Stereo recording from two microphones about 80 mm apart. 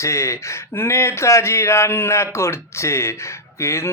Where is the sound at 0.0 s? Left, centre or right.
Left.